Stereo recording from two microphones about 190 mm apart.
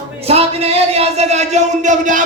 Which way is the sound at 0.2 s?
30° right (ahead or behind).